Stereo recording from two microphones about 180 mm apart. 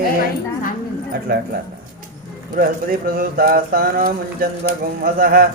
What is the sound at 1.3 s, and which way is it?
Mantra, 60° right (ahead or behind).